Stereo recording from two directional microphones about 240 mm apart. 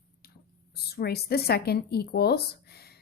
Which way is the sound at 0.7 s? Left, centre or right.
Left.